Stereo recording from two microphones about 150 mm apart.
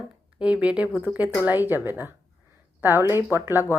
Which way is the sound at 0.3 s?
10° right (ahead or behind).